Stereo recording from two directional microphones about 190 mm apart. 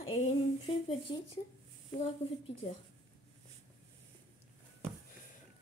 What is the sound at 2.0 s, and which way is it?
Speech, 30° left (ahead or behind).